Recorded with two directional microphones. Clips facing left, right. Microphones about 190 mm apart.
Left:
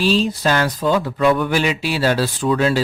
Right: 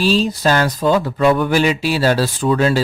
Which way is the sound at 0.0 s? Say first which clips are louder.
Right 2 dB; 40° right (ahead or behind).